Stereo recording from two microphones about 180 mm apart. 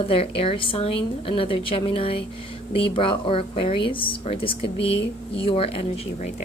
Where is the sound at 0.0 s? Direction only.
30° left (ahead or behind).